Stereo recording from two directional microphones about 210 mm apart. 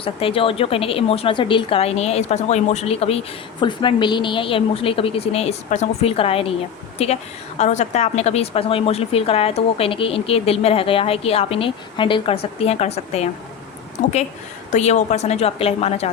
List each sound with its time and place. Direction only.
0.0 s speech: 25° left (ahead or behind)
14.7 s a woman's voice: 35° left (ahead or behind)